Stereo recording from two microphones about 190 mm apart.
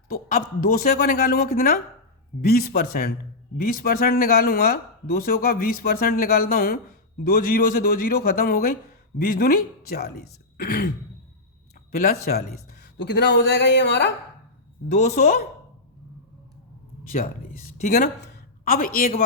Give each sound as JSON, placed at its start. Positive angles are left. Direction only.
{"t": 0.1, "sound": "a man's voice", "side_deg": 50}
{"t": 14.9, "sound": "a man's voice", "side_deg": 45}
{"t": 17.1, "sound": "a man's voice", "side_deg": 45}